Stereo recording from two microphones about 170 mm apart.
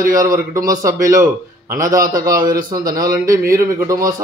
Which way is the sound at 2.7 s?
25° right (ahead or behind).